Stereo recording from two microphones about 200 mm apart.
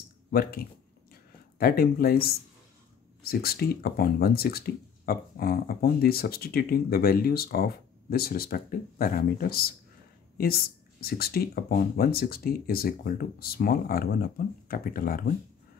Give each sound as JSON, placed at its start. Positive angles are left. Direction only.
{"t": 0.3, "sound": "speech", "side_deg": 50}